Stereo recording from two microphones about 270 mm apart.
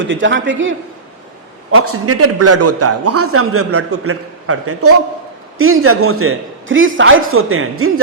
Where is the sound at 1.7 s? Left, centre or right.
Right.